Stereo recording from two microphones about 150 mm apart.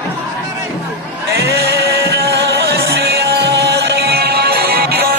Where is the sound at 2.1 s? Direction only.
90° right.